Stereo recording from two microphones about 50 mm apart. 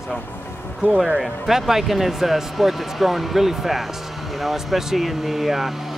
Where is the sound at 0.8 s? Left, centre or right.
Right.